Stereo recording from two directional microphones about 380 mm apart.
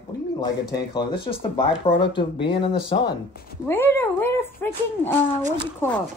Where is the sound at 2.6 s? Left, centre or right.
Centre.